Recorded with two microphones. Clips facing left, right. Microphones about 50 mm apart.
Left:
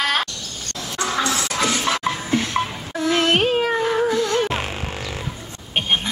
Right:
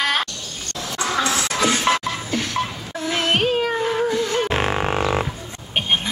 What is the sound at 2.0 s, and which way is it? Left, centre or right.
Music, left.